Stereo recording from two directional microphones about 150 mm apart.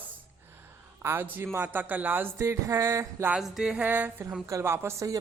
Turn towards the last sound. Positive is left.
turn(degrees=-20)  # may be behind; listen again after turning